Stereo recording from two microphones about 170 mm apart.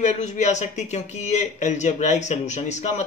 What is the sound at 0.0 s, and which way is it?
Speech, 45° left (ahead or behind).